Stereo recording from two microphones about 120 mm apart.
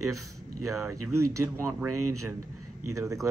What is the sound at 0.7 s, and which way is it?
Speech, 25° right (ahead or behind).